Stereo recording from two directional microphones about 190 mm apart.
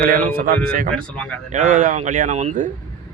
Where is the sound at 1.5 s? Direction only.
40° right (ahead or behind).